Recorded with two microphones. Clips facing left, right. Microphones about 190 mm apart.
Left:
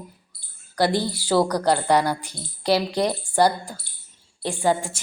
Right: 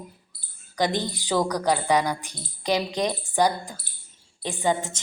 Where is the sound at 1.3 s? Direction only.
Centre (ahead or behind).